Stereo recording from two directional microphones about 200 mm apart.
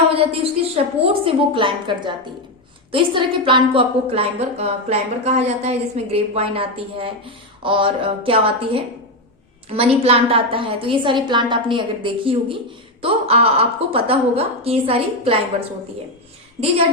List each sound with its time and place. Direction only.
0.1 s a woman's voice: 30° right (ahead or behind)